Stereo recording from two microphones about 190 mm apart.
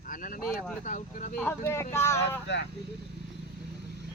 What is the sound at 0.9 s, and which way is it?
Speech, 40° left (ahead or behind).